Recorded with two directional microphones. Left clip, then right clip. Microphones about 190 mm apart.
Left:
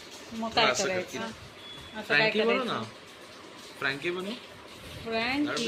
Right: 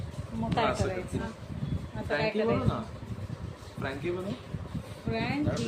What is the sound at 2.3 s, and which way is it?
Speech, 15° left (ahead or behind).